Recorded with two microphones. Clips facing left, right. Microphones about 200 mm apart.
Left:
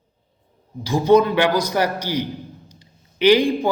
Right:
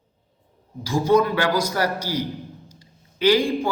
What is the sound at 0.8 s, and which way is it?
A man's voice, 20° left (ahead or behind).